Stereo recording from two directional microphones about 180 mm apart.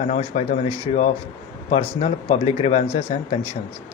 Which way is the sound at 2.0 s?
40° left (ahead or behind).